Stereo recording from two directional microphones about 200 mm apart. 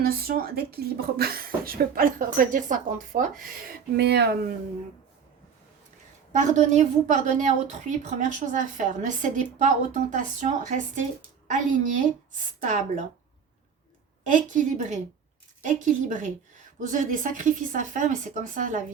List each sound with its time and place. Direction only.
0.0 s speech: 45° right (ahead or behind)
6.3 s a woman's voice: 35° right (ahead or behind)
14.3 s a woman's voice: 40° right (ahead or behind)